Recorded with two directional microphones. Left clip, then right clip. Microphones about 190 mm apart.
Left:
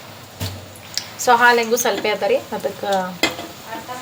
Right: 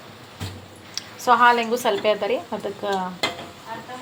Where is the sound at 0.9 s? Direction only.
10° right (ahead or behind).